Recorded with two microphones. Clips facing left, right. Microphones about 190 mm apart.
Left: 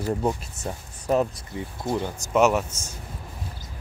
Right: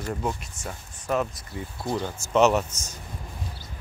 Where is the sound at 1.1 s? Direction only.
35° left (ahead or behind).